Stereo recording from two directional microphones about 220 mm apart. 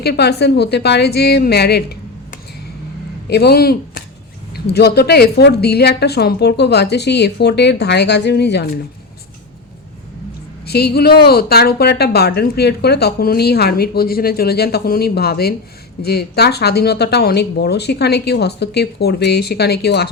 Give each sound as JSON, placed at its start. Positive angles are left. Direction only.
{"t": 0.0, "sound": "a woman's voice", "side_deg": 45}
{"t": 10.7, "sound": "a woman's voice", "side_deg": 45}